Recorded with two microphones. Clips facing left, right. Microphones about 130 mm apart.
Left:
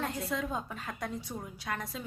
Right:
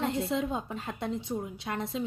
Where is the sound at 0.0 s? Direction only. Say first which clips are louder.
Right 5 dB; 25° right (ahead or behind).